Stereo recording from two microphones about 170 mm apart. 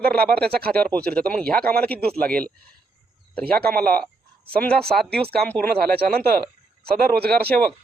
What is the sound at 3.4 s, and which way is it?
Speech, 65° right (ahead or behind).